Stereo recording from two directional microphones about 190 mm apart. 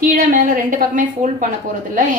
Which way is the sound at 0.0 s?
45° right (ahead or behind).